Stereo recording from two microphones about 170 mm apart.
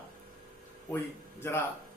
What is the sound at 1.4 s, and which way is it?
Speech, 15° left (ahead or behind).